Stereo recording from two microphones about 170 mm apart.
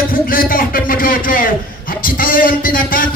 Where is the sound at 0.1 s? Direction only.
55° left (ahead or behind).